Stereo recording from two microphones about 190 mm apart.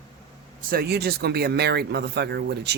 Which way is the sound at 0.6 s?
50° right (ahead or behind).